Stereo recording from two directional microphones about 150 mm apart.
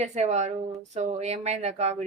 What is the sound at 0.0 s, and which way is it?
A woman's voice, 50° right (ahead or behind).